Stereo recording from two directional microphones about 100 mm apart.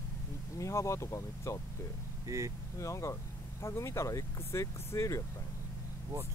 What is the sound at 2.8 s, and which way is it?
Speech, 30° left (ahead or behind).